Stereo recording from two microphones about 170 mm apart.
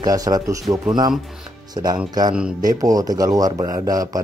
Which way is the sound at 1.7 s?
25° right (ahead or behind).